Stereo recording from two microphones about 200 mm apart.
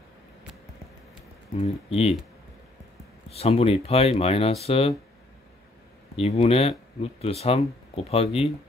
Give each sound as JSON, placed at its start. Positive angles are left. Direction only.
{"t": 1.6, "sound": "speech", "side_deg": 30}
{"t": 3.3, "sound": "speech", "side_deg": 30}
{"t": 6.1, "sound": "speech", "side_deg": 30}